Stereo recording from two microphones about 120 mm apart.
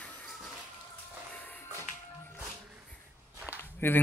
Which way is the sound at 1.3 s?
15° left (ahead or behind).